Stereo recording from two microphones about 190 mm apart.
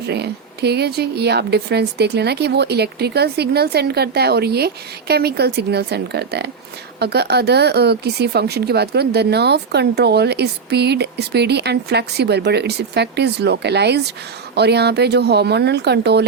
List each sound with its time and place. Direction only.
0.1 s speech: 60° right (ahead or behind)